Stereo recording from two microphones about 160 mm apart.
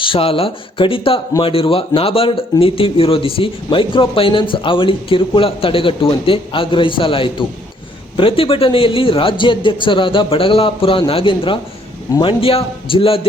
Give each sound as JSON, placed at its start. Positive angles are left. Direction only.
{"t": 0.0, "sound": "speech", "side_deg": 35}